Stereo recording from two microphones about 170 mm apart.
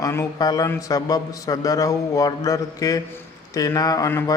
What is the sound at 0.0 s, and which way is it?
Mantra, 15° left (ahead or behind).